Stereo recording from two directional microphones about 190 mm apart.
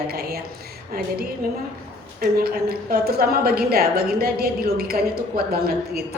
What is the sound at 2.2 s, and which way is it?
A woman's voice, 50° right (ahead or behind).